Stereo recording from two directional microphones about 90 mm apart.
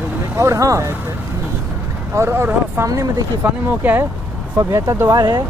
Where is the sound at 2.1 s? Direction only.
30° right (ahead or behind).